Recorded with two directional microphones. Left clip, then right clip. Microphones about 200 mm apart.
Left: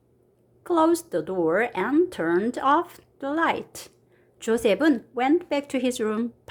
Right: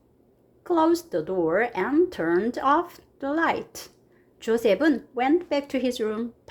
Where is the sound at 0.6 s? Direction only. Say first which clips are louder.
Left 1 dB; 15° left (ahead or behind).